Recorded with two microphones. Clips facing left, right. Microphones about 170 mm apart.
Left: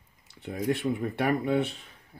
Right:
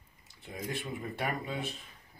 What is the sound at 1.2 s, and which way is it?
Speech, 65° left (ahead or behind).